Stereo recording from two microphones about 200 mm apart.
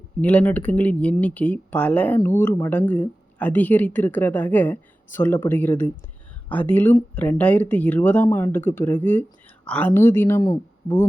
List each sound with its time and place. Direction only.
0.2 s speech: 5° left (ahead or behind)